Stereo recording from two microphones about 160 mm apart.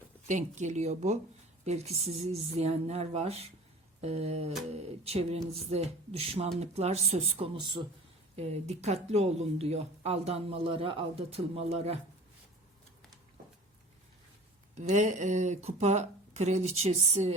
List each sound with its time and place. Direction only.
0.3 s speech: 50° right (ahead or behind); by 7.9 s 30° right (ahead or behind)
8.4 s speech: 40° right (ahead or behind)
14.8 s speech: 50° right (ahead or behind)